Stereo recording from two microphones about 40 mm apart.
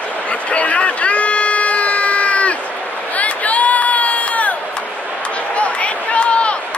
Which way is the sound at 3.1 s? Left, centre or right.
Left.